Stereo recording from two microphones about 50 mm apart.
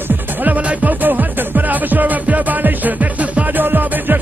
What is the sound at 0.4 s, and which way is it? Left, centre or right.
Music, right.